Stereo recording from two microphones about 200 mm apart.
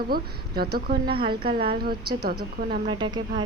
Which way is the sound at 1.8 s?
50° right (ahead or behind).